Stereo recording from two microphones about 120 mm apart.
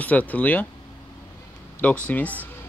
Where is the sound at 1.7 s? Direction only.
10° left (ahead or behind).